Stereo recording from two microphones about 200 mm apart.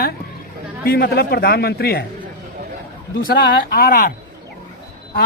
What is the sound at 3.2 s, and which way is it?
Speech, 45° left (ahead or behind).